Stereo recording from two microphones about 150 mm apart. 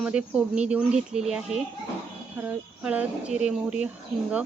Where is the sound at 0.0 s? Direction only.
5° right (ahead or behind).